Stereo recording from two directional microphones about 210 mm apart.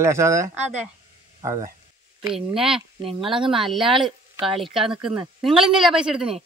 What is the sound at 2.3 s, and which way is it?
Speech, 5° right (ahead or behind).